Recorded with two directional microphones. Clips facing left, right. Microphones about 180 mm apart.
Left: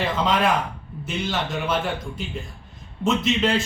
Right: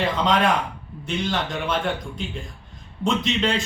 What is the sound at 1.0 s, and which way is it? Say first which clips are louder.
A man's voice: right 1 dB; 5° left (ahead or behind).